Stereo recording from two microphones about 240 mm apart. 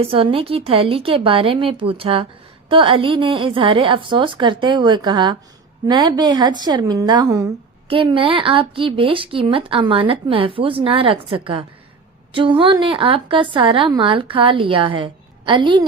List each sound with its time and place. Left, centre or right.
0.0 s a woman's voice: right